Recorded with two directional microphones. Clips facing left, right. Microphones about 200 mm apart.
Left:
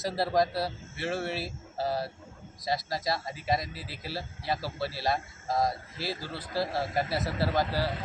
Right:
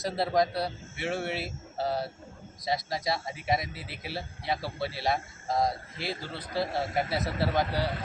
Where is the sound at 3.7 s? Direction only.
60° right (ahead or behind).